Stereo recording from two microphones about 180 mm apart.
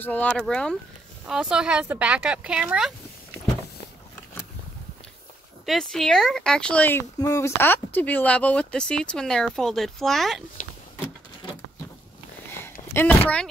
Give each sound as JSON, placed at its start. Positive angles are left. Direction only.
{"t": 0.0, "sound": "speech", "side_deg": 10}
{"t": 5.7, "sound": "speech", "side_deg": 0}
{"t": 12.9, "sound": "speech", "side_deg": 10}